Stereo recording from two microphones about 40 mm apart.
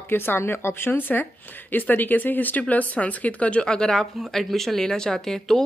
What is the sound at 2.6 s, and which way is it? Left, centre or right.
Speech, left.